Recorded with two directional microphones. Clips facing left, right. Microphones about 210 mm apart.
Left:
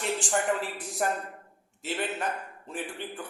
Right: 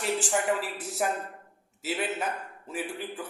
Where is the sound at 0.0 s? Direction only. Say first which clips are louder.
Right 1 dB; 5° right (ahead or behind).